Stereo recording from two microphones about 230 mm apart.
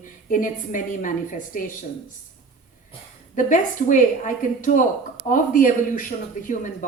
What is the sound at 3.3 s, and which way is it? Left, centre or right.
A woman's voice, left.